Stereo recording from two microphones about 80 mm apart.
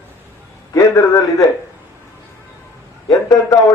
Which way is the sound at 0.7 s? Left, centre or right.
Left.